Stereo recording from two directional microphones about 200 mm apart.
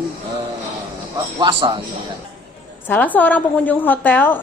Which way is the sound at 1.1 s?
25° right (ahead or behind).